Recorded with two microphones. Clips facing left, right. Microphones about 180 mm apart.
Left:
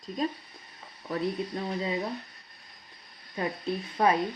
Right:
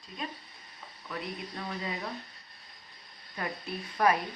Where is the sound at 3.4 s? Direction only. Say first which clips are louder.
Left 6 dB; 25° left (ahead or behind).